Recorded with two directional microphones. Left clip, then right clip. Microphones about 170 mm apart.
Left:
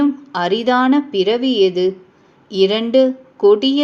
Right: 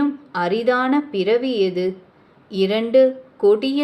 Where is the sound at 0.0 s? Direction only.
35° left (ahead or behind).